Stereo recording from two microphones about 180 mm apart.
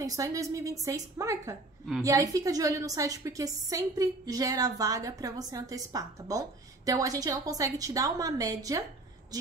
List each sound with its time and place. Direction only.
0.0 s a woman's voice: 20° right (ahead or behind)